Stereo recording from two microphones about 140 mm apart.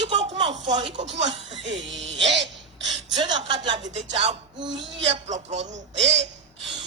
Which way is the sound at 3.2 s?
30° right (ahead or behind).